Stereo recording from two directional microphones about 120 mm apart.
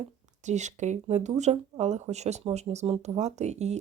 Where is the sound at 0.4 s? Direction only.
80° right.